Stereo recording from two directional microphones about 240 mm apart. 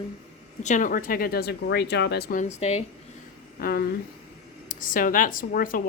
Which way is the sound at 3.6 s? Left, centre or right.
Left.